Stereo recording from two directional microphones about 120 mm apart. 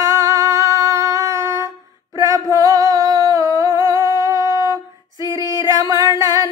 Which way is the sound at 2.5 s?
30° right (ahead or behind).